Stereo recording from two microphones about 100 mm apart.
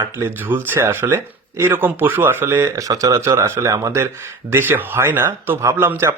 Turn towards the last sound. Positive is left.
turn(degrees=-25)  # may be behind; listen again after turning